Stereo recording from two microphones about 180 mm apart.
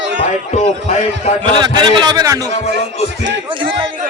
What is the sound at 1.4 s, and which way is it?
A man's voice, 25° right (ahead or behind).